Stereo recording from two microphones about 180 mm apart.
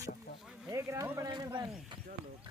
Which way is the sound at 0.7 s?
15° right (ahead or behind).